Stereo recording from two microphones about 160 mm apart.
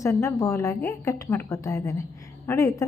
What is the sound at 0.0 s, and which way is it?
A woman's voice, 20° left (ahead or behind).